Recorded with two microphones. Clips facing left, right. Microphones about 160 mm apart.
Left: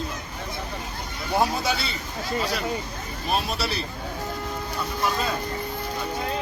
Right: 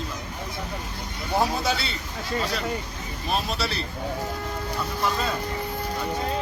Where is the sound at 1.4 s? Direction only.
Centre (ahead or behind).